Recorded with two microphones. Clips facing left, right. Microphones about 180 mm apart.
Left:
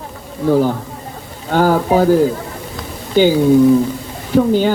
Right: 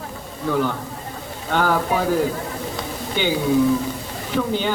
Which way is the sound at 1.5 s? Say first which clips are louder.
Left 7 dB; 35° left (ahead or behind).